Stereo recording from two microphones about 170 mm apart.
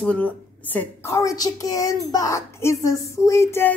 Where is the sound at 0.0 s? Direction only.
10° left (ahead or behind).